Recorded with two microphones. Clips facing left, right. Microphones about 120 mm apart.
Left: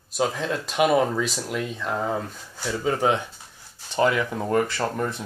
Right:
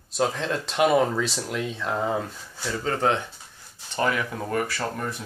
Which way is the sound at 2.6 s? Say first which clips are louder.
Left 2 dB; 10° left (ahead or behind).